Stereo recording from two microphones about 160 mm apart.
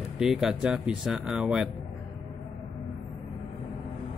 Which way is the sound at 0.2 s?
Centre (ahead or behind).